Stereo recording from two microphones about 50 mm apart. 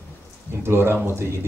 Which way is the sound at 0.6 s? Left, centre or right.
Right.